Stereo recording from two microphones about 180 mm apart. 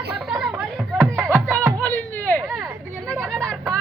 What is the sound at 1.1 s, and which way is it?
Music, 10° right (ahead or behind).